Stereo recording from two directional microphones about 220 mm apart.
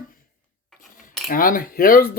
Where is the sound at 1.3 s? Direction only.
40° left (ahead or behind).